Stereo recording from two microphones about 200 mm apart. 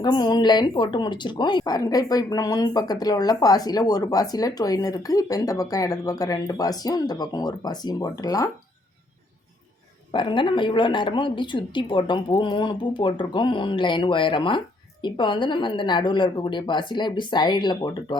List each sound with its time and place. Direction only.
0.0 s a woman's voice: 20° left (ahead or behind)
10.1 s a woman's voice: 25° left (ahead or behind)